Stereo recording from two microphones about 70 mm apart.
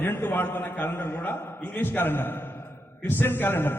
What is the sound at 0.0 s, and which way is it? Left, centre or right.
A man's voice, left.